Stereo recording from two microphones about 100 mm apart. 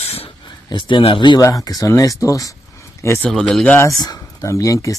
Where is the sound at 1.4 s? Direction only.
35° left (ahead or behind).